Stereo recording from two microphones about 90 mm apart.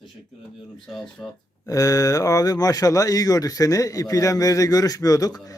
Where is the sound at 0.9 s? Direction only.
5° left (ahead or behind).